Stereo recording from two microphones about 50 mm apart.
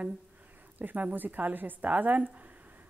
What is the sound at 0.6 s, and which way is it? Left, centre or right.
A woman's voice, right.